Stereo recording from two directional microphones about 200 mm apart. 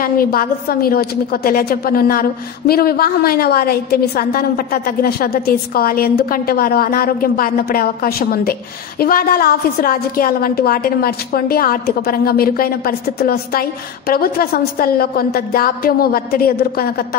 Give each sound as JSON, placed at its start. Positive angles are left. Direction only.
{"t": 0.0, "sound": "a woman's voice", "side_deg": 45}